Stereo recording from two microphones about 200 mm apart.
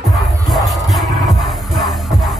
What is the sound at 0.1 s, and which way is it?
Music, centre (ahead or behind).